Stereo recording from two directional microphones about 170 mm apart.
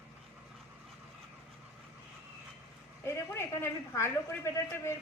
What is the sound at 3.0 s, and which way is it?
A man's voice, 15° left (ahead or behind).